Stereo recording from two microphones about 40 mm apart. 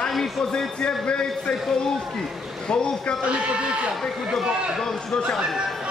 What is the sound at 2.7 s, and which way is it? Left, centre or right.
Speech, left.